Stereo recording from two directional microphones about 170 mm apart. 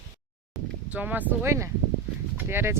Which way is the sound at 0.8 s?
10° right (ahead or behind).